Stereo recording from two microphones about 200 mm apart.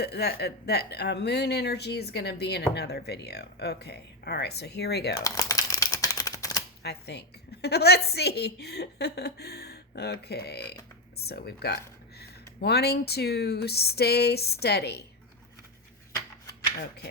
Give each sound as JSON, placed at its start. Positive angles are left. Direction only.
{"t": 0.0, "sound": "speech", "side_deg": 55}
{"t": 5.2, "sound": "a sound", "side_deg": 15}
{"t": 6.8, "sound": "a woman's voice", "side_deg": 55}